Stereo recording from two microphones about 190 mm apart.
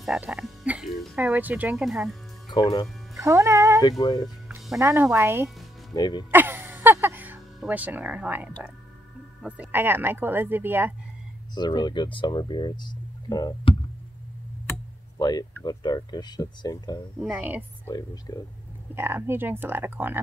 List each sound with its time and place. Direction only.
0.0 s speech: 5° right (ahead or behind)
2.5 s speech: 20° left (ahead or behind)
3.2 s speech: 15° right (ahead or behind)
4.0 s speech: 20° left (ahead or behind)
4.7 s speech: 10° right (ahead or behind)
5.9 s speech: 20° left (ahead or behind)
6.3 s music: 10° right (ahead or behind)
9.4 s speech: 5° right (ahead or behind)
11.5 s speech: 20° left (ahead or behind)
15.1 s speech: 20° left (ahead or behind)
17.2 s speech: 10° right (ahead or behind)
17.8 s speech: 20° left (ahead or behind)
18.9 s speech: 10° right (ahead or behind)